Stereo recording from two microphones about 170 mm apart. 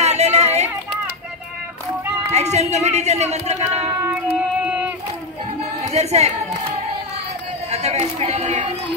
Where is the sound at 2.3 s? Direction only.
40° right (ahead or behind).